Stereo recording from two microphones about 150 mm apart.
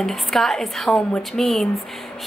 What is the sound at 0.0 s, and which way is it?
A woman's voice, centre (ahead or behind).